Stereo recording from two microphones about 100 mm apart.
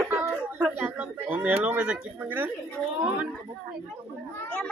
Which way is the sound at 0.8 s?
20° right (ahead or behind).